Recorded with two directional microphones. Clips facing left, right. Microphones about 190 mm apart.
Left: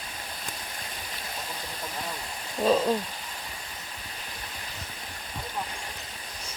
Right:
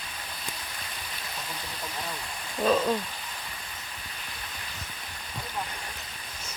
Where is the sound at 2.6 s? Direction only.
25° left (ahead or behind).